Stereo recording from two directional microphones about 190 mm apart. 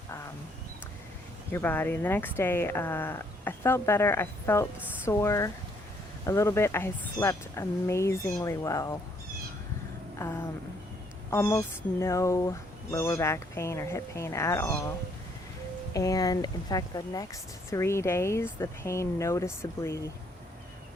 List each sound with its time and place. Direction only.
1.5 s speech: 10° left (ahead or behind)
10.2 s a sound: 15° left (ahead or behind)
11.3 s speech: 15° left (ahead or behind)